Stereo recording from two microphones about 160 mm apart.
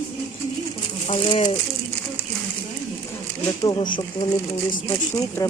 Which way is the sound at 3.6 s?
25° left (ahead or behind).